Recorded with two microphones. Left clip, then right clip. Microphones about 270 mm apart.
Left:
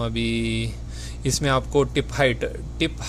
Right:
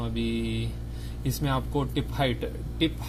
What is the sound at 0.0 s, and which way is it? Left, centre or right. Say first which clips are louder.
Speech: left 6 dB; left.